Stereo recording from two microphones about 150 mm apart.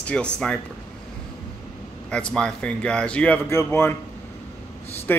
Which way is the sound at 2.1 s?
5° left (ahead or behind).